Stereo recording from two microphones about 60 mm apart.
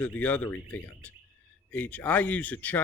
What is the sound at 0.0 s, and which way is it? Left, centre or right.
Speech, left.